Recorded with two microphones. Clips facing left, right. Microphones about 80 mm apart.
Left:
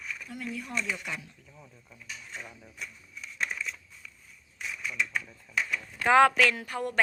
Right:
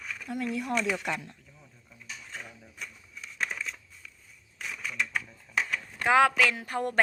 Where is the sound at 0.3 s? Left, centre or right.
Right.